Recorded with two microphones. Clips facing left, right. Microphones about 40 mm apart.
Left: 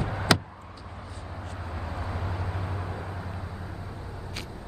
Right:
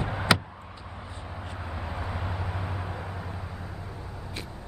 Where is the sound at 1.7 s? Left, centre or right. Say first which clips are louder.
Even; centre.